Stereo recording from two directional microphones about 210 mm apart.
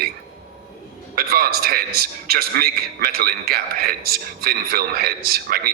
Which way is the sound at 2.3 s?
45° right (ahead or behind).